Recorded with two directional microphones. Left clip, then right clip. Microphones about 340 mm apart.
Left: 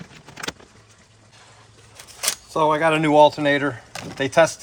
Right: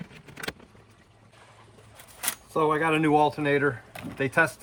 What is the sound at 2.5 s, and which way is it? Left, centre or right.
Speech, left.